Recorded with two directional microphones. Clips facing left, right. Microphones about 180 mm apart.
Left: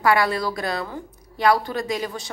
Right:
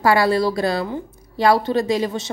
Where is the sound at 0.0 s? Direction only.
30° right (ahead or behind).